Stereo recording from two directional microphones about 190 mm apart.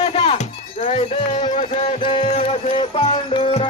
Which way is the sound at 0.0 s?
35° left (ahead or behind).